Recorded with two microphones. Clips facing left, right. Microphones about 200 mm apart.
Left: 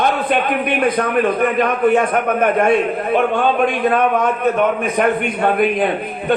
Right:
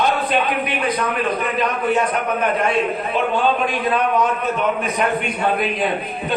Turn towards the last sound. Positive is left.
turn(degrees=55)  # may be behind; listen again after turning